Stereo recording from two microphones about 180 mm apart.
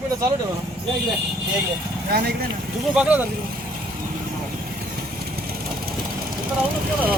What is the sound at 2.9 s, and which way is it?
Speech, 5° right (ahead or behind).